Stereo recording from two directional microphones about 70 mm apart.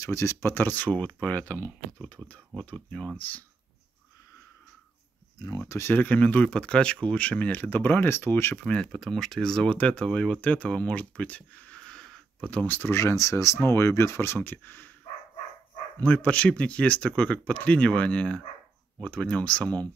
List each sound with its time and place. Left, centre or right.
0.0 s speech: left
5.7 s speech: left
5.9 s speech: left
8.9 s speech: centre; by 12.9 s left
12.9 s speech: left
16.0 s speech: centre